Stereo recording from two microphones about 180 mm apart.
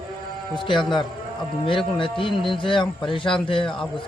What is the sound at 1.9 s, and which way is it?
A man's voice, 30° left (ahead or behind).